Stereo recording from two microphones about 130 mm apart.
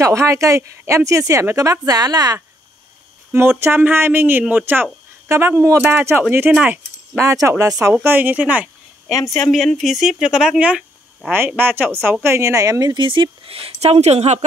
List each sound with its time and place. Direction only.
0.0 s speech: 25° right (ahead or behind)
3.3 s speech: 20° right (ahead or behind)
7.2 s speech: 25° right (ahead or behind)
9.1 s speech: 25° left (ahead or behind)
9.4 s a woman's voice: centre (ahead or behind); by 14.4 s 55° right (ahead or behind)